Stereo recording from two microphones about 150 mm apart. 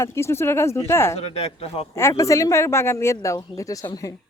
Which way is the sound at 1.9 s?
20° left (ahead or behind).